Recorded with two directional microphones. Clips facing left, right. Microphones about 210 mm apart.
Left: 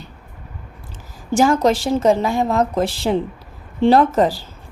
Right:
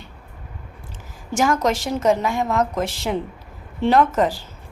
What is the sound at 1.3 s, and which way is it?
Speech, 30° left (ahead or behind).